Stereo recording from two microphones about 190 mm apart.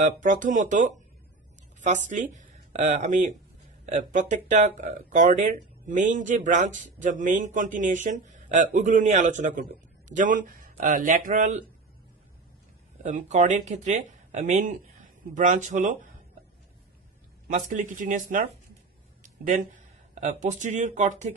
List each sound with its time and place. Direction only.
0.0 s a woman's voice: 45° right (ahead or behind)
13.0 s speech: 40° right (ahead or behind)
17.5 s speech: 40° right (ahead or behind)
19.2 s a sound: 45° right (ahead or behind)
20.2 s speech: 40° right (ahead or behind)